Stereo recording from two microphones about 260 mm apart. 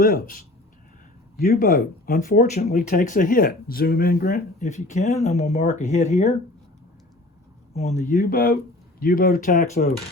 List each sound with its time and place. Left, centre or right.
0.0 s speech: left
7.7 s speech: left